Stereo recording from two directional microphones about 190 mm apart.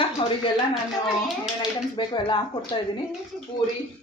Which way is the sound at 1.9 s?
25° left (ahead or behind).